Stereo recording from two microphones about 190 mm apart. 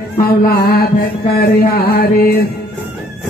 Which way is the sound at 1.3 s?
55° left (ahead or behind).